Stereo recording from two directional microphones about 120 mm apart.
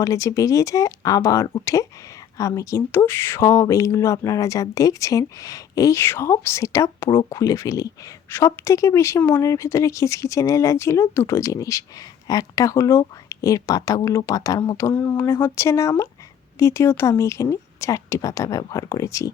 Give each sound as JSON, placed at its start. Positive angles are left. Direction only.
{"t": 0.0, "sound": "speech", "side_deg": 25}